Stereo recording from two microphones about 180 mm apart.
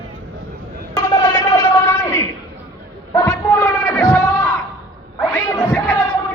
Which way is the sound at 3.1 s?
20° left (ahead or behind).